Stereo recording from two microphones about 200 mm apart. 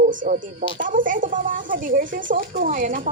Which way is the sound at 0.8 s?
40° right (ahead or behind).